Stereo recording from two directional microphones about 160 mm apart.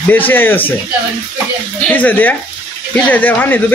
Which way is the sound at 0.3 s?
10° left (ahead or behind).